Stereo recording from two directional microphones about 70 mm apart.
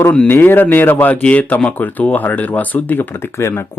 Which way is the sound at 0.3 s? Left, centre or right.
Left.